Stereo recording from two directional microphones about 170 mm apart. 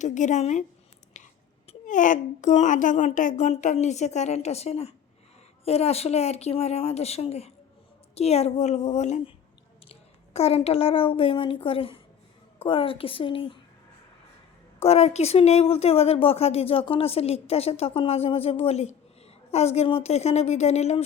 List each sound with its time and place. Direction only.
0.0 s a child's voice: 45° left (ahead or behind)
14.8 s a woman's voice: 35° left (ahead or behind)